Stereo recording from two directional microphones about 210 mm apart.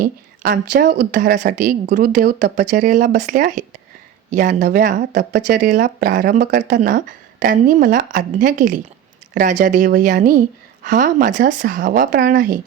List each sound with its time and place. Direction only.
0.0 s a woman's voice: 40° right (ahead or behind)